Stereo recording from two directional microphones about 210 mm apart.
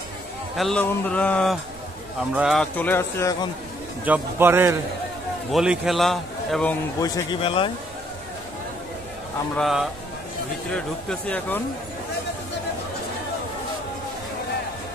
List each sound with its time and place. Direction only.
0.6 s a man's voice: 5° left (ahead or behind)
4.0 s a man's voice: 10° right (ahead or behind)
7.0 s a man's voice: 20° left (ahead or behind)
9.6 s a man's voice: centre (ahead or behind)